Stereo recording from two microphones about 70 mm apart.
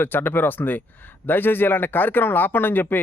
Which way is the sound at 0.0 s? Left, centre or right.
Left.